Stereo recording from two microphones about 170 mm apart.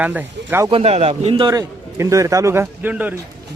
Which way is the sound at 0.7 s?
35° right (ahead or behind).